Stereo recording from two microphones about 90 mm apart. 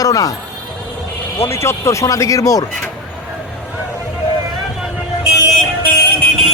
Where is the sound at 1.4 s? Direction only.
30° left (ahead or behind).